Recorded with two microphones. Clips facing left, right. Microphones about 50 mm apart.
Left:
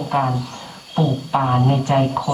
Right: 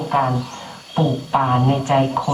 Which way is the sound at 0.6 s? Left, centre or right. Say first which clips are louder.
Even; centre.